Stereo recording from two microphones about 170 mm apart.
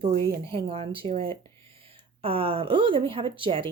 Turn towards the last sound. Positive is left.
turn(degrees=-30)  # may be behind; listen again after turning